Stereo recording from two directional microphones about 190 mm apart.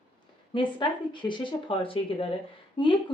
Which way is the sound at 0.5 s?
25° left (ahead or behind).